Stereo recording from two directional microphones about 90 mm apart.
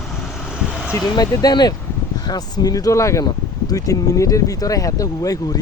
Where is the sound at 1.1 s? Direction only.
50° left (ahead or behind).